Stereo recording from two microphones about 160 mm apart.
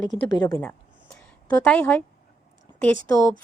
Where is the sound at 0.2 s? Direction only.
25° left (ahead or behind).